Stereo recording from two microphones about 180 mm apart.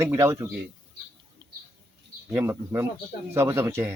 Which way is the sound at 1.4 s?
25° right (ahead or behind).